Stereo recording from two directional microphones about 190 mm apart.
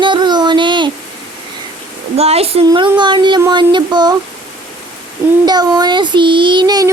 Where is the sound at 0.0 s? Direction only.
25° right (ahead or behind).